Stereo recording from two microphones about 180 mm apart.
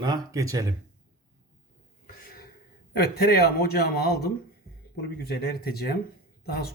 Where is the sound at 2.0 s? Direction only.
50° left (ahead or behind).